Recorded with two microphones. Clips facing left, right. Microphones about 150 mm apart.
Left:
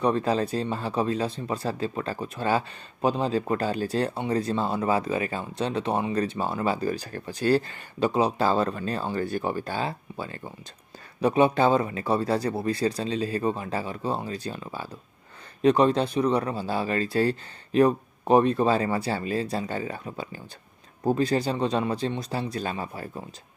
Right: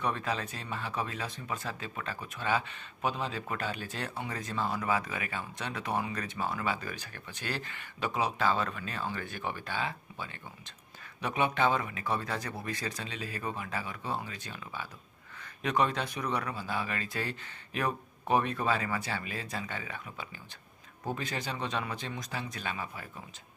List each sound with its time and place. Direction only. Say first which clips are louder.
0.0 s speech: left 10 dB; 35° left (ahead or behind)